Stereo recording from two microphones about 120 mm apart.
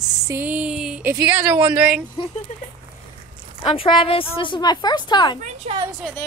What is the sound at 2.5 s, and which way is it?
Speech, 85° left.